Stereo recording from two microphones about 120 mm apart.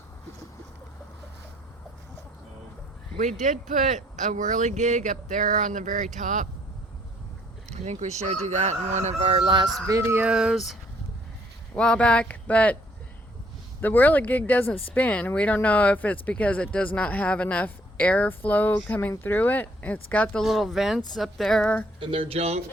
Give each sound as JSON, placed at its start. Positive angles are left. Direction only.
{"t": 3.2, "sound": "speech", "side_deg": -90}
{"t": 7.7, "sound": "speech", "side_deg": -70}
{"t": 9.8, "sound": "a sound", "side_deg": -25}
{"t": 10.2, "sound": "speech", "side_deg": -5}
{"t": 11.7, "sound": "speech", "side_deg": 5}
{"t": 13.8, "sound": "speech", "side_deg": 15}
{"t": 20.4, "sound": "speech", "side_deg": 0}
{"t": 22.0, "sound": "speech", "side_deg": -45}